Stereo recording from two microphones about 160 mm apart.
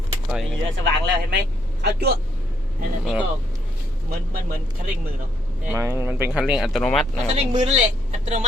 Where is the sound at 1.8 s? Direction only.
90° right.